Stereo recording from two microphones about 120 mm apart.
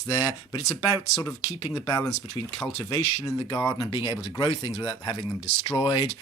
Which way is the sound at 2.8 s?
30° left (ahead or behind).